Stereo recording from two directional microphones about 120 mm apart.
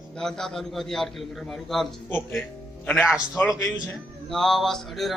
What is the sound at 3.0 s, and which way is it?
Speech, 5° right (ahead or behind).